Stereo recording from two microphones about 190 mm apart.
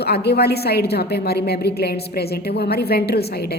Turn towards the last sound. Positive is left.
turn(degrees=55)  # may be behind; listen again after turning